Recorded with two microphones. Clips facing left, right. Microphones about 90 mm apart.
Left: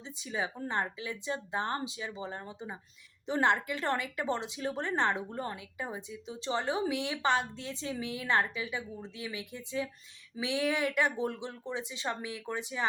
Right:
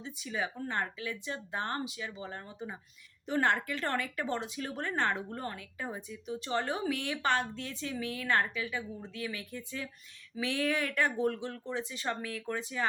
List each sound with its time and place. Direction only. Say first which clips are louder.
0.0 s speech: even; 25° left (ahead or behind)